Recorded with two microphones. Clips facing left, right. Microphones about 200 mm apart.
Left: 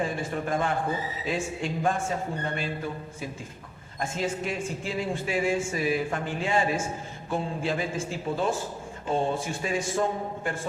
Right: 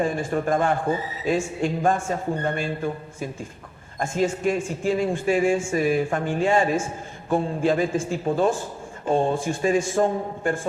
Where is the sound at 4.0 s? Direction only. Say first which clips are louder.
Right 6 dB; 45° right (ahead or behind).